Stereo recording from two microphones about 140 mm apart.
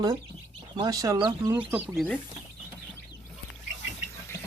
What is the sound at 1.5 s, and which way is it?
Speech, 10° right (ahead or behind).